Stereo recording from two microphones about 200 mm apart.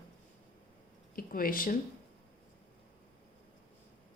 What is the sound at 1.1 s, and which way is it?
Speech, 45° left (ahead or behind).